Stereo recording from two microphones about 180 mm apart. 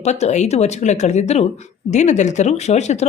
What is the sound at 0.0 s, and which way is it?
Speech, 40° left (ahead or behind).